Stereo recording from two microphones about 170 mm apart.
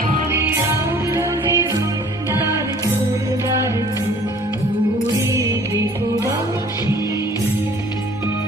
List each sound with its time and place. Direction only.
0.3 s music: 15° right (ahead or behind)
5.3 s music: 20° right (ahead or behind)